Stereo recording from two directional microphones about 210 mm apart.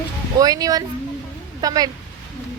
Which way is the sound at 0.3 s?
15° right (ahead or behind).